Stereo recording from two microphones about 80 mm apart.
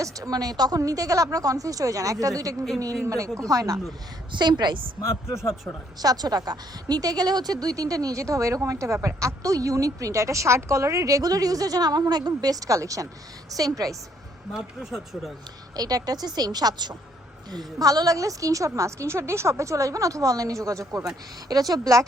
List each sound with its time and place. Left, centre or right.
0.0 s a woman's voice: right
4.3 s a woman's voice: right
6.0 s a woman's voice: right
14.5 s speech: centre
15.7 s a woman's voice: right